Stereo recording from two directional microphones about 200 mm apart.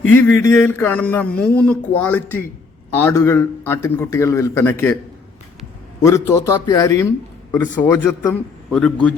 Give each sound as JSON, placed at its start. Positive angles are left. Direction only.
{"t": 0.1, "sound": "speech", "side_deg": 10}
{"t": 6.0, "sound": "speech", "side_deg": 15}